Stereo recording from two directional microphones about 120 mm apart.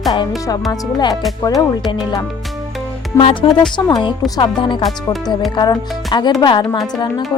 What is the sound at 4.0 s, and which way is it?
Speech, 35° left (ahead or behind).